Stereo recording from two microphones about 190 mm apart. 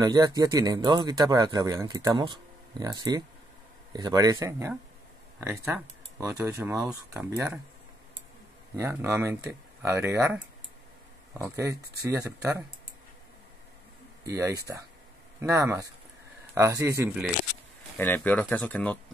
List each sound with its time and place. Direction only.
0.0 s speech: 20° right (ahead or behind)
8.7 s speech: 15° right (ahead or behind)
14.2 s speech: 15° right (ahead or behind)
17.9 s speech: 10° left (ahead or behind)